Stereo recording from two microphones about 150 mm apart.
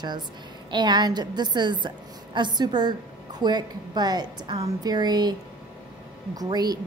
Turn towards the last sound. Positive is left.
turn(degrees=-25)  # may be behind; listen again after turning